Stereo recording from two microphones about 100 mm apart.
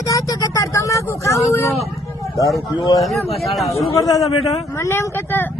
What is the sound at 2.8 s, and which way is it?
Speech, 40° left (ahead or behind).